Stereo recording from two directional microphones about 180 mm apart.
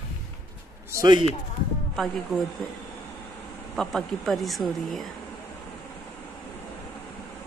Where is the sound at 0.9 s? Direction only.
15° right (ahead or behind).